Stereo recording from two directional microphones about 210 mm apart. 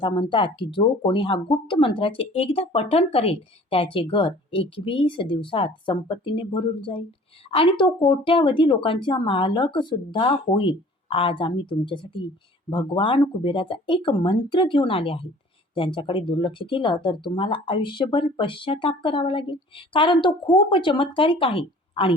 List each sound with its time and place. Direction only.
0.0 s speech: 25° left (ahead or behind)